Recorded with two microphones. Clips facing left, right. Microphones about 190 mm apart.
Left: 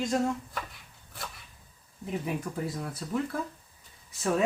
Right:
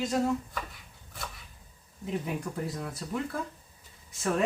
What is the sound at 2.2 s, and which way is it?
Speech, centre (ahead or behind).